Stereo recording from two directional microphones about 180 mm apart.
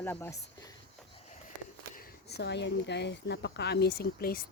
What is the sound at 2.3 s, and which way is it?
Speech, 70° left (ahead or behind).